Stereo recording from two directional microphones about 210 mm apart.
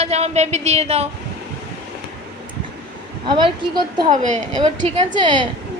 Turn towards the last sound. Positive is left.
turn(degrees=-25)  # may be behind; listen again after turning